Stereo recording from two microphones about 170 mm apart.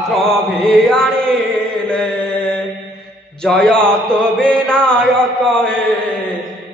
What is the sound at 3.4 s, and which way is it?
Mantra, 5° left (ahead or behind).